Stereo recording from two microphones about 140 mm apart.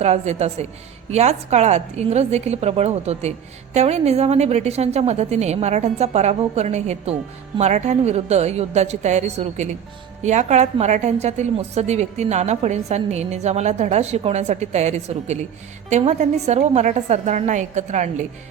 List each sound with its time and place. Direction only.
0.0 s a woman's voice: 50° right (ahead or behind)
10.2 s a woman's voice: 55° right (ahead or behind)